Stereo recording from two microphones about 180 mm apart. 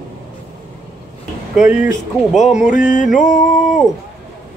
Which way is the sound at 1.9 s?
40° left (ahead or behind).